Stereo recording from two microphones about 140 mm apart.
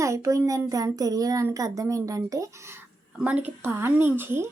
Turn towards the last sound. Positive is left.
turn(degrees=-15)  # may be behind; listen again after turning